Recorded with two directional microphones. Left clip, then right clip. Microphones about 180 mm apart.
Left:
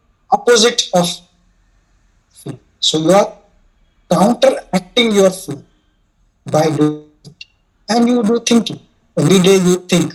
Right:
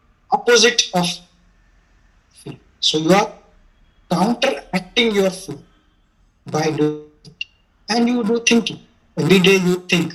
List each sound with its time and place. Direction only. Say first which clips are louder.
0.3 s speech: left 3 dB; 60° left (ahead or behind)
2.3 s speech: left 5 dB; 60° left (ahead or behind)
6.4 s a sound: left 5 dB; 60° left (ahead or behind)
7.9 s speech: left 5 dB; 60° left (ahead or behind)